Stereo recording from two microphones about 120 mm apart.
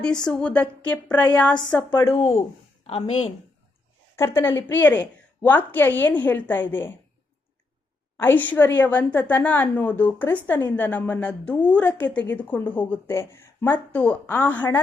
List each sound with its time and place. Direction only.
0.0 s speech: 5° left (ahead or behind)
2.0 s speech: 55° left (ahead or behind)
4.2 s speech: 20° left (ahead or behind)
8.2 s speech: 15° left (ahead or behind)